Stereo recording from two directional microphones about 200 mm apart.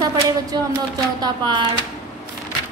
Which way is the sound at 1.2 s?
20° right (ahead or behind).